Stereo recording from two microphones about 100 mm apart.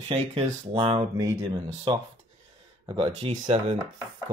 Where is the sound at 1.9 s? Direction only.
60° right (ahead or behind).